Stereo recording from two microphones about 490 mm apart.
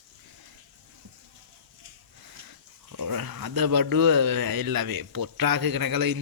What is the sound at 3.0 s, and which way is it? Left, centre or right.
Speech, right.